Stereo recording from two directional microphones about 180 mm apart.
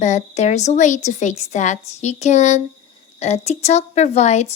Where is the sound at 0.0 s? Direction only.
40° left (ahead or behind).